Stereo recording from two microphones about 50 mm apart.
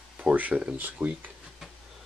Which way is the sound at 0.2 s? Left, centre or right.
Right.